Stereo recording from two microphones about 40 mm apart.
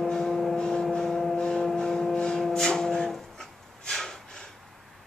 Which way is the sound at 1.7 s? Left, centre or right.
Centre.